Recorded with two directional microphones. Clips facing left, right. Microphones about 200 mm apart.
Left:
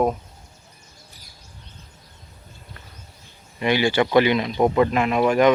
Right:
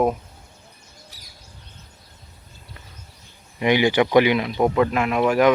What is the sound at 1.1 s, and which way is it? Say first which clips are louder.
Bird: even; 90° right.